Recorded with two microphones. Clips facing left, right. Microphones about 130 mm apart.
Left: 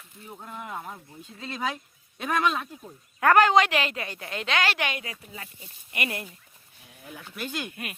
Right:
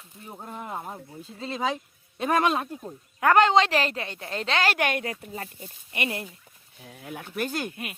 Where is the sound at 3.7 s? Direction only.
35° right (ahead or behind).